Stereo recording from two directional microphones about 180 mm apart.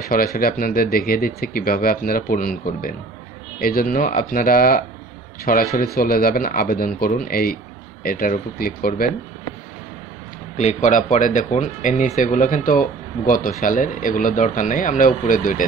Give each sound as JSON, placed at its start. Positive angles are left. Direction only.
{"t": 0.0, "sound": "speech", "side_deg": 55}
{"t": 10.6, "sound": "speech", "side_deg": 40}